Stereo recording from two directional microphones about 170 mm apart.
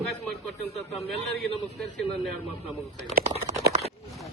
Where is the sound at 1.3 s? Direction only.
Centre (ahead or behind).